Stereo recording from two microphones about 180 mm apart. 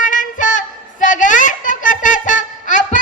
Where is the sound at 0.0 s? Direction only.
45° left (ahead or behind).